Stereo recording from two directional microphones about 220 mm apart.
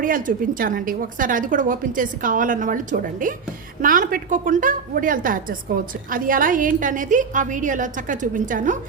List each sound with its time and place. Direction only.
0.0 s a woman's voice: 40° right (ahead or behind)